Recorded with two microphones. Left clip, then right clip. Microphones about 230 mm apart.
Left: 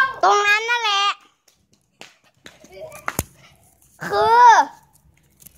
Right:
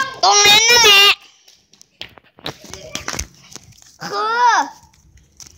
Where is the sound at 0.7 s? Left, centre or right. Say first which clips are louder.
Right 10 dB; centre.